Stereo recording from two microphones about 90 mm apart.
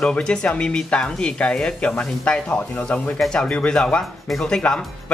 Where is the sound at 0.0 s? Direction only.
10° left (ahead or behind).